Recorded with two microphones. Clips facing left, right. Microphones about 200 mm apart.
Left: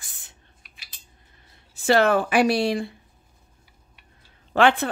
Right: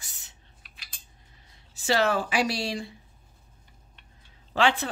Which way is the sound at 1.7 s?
55° left (ahead or behind).